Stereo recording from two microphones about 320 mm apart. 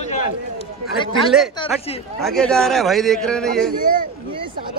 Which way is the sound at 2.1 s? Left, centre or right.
Centre.